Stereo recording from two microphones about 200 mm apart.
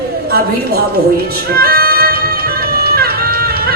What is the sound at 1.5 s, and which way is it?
Music, 50° right (ahead or behind).